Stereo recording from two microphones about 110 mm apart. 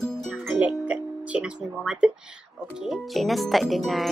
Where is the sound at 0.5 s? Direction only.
10° right (ahead or behind).